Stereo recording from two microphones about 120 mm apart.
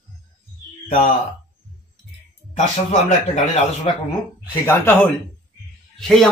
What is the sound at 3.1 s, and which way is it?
Speech, 65° left (ahead or behind).